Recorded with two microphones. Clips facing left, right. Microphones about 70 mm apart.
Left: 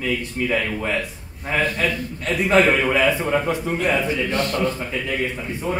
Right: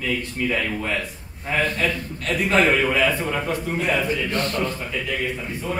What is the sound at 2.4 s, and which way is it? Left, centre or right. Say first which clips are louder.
A man's voice: left 2 dB; centre.